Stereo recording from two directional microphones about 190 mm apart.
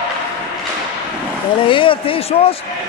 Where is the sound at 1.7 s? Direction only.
25° left (ahead or behind).